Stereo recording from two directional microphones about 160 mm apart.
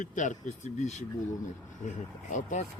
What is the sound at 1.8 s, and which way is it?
Speech, 50° left (ahead or behind).